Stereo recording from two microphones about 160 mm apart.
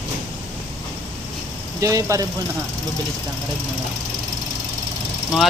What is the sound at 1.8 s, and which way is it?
Speech, 20° right (ahead or behind).